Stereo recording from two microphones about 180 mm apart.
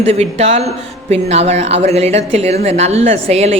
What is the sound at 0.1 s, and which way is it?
A woman's voice, 35° right (ahead or behind).